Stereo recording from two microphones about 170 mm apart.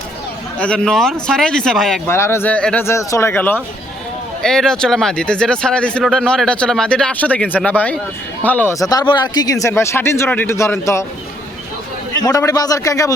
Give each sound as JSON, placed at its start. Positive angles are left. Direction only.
{"t": 0.6, "sound": "speech", "side_deg": 5}
{"t": 2.0, "sound": "speech", "side_deg": 15}
{"t": 12.2, "sound": "a man's voice", "side_deg": 20}